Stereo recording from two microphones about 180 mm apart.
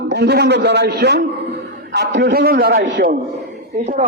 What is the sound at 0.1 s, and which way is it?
A man's voice, 65° right (ahead or behind).